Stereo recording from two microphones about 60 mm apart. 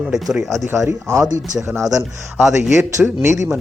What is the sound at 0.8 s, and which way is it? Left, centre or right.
Speech, right.